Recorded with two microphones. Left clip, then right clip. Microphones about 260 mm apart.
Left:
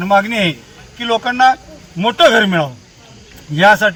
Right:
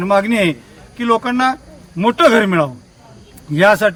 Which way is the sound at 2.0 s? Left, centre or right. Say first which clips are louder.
Left 1 dB; centre.